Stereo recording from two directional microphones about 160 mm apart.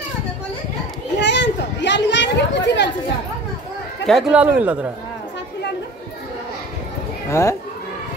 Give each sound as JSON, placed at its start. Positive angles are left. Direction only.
{"t": 1.2, "sound": "children playing", "side_deg": 90}
{"t": 4.0, "sound": "speech", "side_deg": 0}
{"t": 7.2, "sound": "speech", "side_deg": 15}